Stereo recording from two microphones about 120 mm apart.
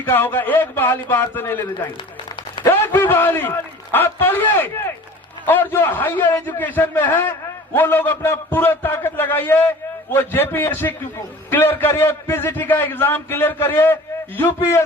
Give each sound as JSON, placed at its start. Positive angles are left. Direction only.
{"t": 0.0, "sound": "a man's voice", "side_deg": 15}